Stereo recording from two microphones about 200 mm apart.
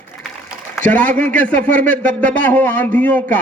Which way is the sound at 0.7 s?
10° left (ahead or behind).